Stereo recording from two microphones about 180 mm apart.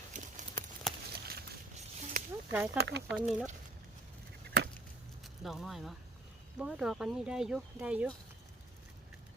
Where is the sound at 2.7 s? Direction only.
70° right (ahead or behind).